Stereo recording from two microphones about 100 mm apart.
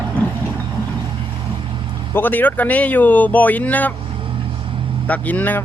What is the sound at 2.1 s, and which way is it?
Speech, 20° left (ahead or behind).